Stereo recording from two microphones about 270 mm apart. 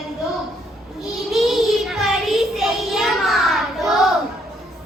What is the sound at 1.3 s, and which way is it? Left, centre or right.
Child singing, centre.